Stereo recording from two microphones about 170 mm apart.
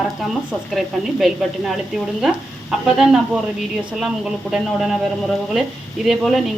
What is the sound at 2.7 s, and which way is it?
Speech, centre (ahead or behind).